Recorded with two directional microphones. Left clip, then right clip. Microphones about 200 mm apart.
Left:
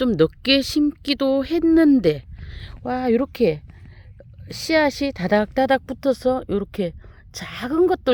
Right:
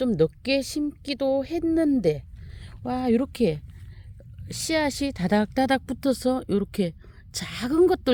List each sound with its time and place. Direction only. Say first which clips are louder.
0.0 s speech: left 4 dB; 30° left (ahead or behind)
2.8 s speech: left 4 dB; 10° left (ahead or behind)